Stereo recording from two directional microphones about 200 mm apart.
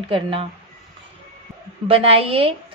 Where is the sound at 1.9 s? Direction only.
30° right (ahead or behind).